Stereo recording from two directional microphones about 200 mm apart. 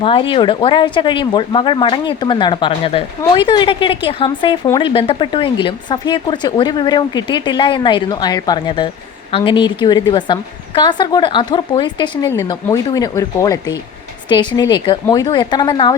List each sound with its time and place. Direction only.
0.0 s speech: 25° left (ahead or behind)